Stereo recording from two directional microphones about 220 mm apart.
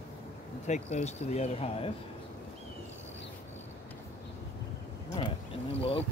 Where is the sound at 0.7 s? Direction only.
30° left (ahead or behind).